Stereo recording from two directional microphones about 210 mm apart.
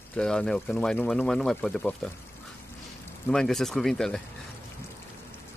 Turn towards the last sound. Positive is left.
turn(degrees=0)  # may be behind; listen again after turning